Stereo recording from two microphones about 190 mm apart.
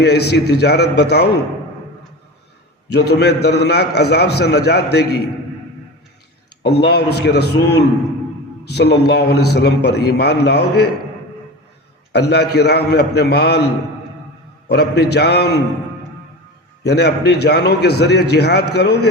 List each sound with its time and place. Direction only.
0.0 s a man's voice: 60° left (ahead or behind)
2.9 s a man's voice: 60° left (ahead or behind)
6.6 s a man's voice: 60° left (ahead or behind)
12.1 s a man's voice: 60° left (ahead or behind)
14.7 s a man's voice: 60° left (ahead or behind)
16.8 s a man's voice: 60° left (ahead or behind)